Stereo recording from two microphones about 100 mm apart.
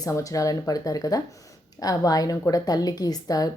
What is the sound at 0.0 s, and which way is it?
A woman's voice, 35° left (ahead or behind).